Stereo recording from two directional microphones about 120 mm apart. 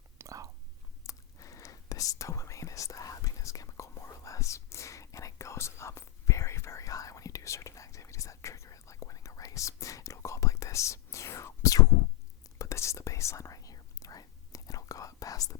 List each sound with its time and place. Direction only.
0.2 s whispering: 25° right (ahead or behind)
1.0 s whispering: 30° left (ahead or behind)